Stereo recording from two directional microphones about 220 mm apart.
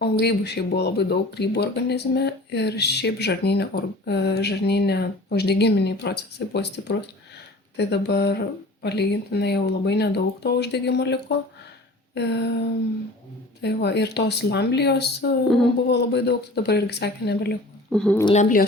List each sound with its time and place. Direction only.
0.0 s speech: 50° left (ahead or behind)
13.6 s speech: 50° left (ahead or behind)
17.9 s speech: 5° left (ahead or behind)
18.3 s a woman's voice: 35° left (ahead or behind)